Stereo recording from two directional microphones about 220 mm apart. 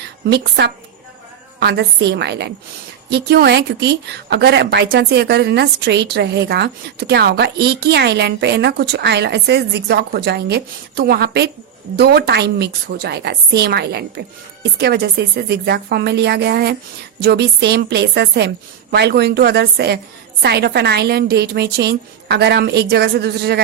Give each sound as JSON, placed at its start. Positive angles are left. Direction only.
{"t": 0.3, "sound": "a woman's voice", "side_deg": -50}